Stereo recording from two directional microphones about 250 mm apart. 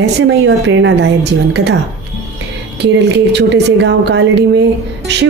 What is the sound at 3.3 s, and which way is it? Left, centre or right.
A woman's voice, right.